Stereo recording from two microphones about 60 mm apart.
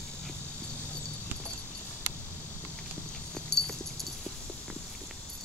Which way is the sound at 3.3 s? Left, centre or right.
Centre.